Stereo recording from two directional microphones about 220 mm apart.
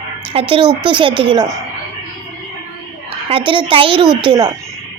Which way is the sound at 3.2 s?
25° right (ahead or behind).